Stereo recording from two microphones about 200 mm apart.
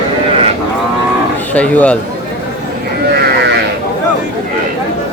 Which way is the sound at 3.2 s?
55° right (ahead or behind).